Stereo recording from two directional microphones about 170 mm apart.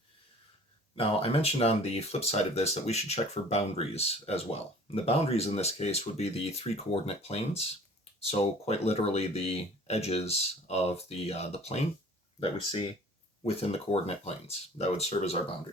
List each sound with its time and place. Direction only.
0.9 s speech: 35° left (ahead or behind)